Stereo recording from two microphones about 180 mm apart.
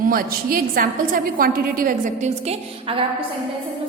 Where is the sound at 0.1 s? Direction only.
55° right (ahead or behind); by 3.2 s 30° right (ahead or behind).